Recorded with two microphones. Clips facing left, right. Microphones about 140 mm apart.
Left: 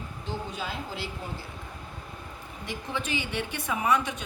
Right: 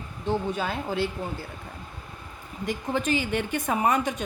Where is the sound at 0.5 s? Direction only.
55° right (ahead or behind).